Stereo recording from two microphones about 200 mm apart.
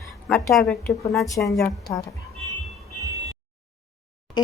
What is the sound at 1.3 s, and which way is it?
Speech, 15° left (ahead or behind).